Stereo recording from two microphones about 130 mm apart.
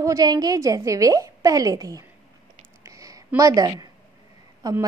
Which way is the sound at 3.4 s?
25° right (ahead or behind).